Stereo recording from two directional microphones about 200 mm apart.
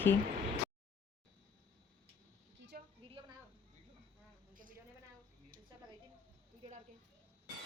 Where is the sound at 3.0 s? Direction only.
30° right (ahead or behind).